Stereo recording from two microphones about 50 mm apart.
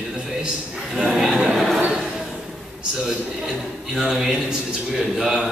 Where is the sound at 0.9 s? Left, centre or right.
Centre.